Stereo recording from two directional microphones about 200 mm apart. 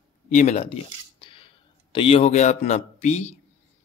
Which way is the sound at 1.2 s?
25° left (ahead or behind).